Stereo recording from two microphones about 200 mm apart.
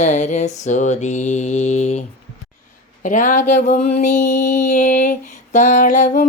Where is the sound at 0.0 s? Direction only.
40° left (ahead or behind).